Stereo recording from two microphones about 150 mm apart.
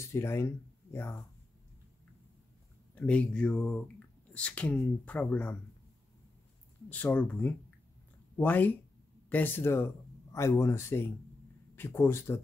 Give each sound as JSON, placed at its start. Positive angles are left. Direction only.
{"t": 0.0, "sound": "speech", "side_deg": 20}
{"t": 2.9, "sound": "speech", "side_deg": 10}
{"t": 6.9, "sound": "speech", "side_deg": 10}